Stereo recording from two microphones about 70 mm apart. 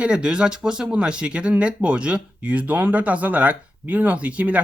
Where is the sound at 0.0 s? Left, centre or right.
Centre.